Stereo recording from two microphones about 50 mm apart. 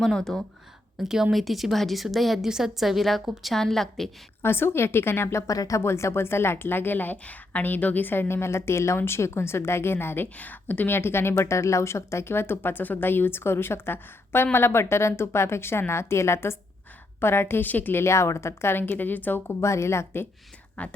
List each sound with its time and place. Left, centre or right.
0.0 s speech: centre
0.9 s a woman's voice: centre
4.4 s a woman's voice: left
5.4 s a woman's voice: left
10.3 s a woman's voice: left
17.7 s a woman's voice: left
18.0 s speech: left
18.7 s a woman's voice: left
19.5 s speech: left
20.8 s speech: left